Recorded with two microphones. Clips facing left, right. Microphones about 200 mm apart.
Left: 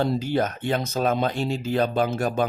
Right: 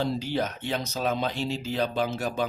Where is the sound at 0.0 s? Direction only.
50° left (ahead or behind).